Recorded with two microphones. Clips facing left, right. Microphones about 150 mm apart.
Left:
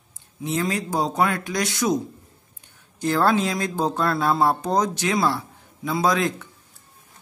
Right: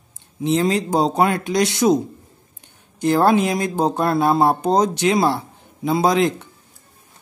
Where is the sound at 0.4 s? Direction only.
25° right (ahead or behind).